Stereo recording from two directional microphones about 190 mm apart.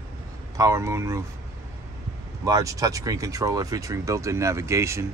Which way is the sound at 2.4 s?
20° right (ahead or behind).